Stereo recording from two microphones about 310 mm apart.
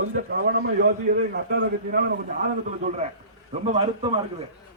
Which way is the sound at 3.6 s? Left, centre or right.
Centre.